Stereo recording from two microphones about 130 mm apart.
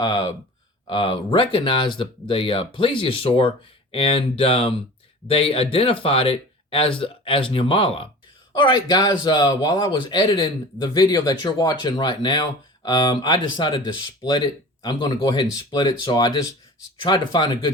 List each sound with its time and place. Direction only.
0.0 s a man's voice: 35° left (ahead or behind)